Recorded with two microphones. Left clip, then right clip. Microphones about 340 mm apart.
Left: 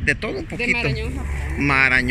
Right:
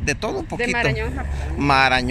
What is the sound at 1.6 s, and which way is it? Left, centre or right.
Speech, centre.